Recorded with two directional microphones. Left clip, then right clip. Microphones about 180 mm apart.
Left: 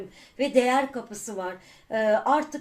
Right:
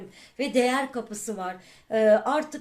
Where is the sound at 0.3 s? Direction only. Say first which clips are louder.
Left 2 dB; 45° right (ahead or behind).